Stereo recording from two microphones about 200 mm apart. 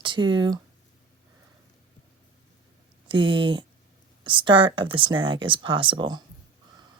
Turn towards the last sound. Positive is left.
turn(degrees=-20)  # may be behind; listen again after turning